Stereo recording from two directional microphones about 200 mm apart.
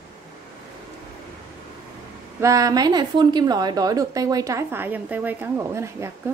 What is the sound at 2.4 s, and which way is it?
A woman's voice, 15° right (ahead or behind).